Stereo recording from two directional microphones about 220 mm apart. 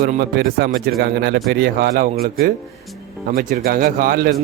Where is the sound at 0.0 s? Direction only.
45° right (ahead or behind).